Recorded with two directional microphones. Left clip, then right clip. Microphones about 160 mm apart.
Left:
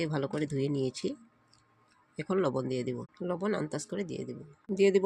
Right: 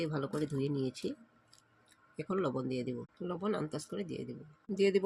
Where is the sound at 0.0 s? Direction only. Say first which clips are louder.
Left 3 dB; 30° left (ahead or behind).